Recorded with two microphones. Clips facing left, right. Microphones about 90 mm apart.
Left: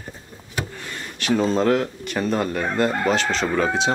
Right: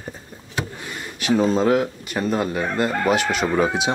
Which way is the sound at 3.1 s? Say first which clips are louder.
Right 1 dB; 10° right (ahead or behind).